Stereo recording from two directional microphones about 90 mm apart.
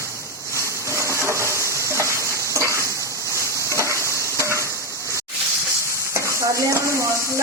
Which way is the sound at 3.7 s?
35° right (ahead or behind).